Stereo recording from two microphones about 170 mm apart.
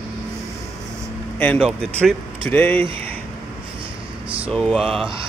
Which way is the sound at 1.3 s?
10° left (ahead or behind).